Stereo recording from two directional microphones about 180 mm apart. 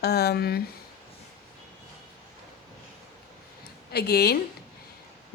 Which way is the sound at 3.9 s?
60° left (ahead or behind).